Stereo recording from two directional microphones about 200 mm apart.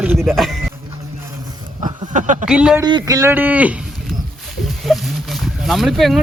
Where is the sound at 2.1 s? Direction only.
40° right (ahead or behind).